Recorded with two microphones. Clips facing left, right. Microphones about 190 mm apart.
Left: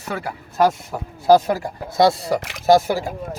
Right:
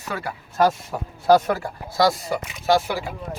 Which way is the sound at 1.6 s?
25° left (ahead or behind).